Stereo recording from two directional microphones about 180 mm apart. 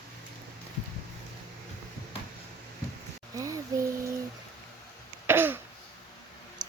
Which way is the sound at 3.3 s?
20° right (ahead or behind).